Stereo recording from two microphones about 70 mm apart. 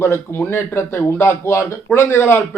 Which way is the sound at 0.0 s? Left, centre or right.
Left.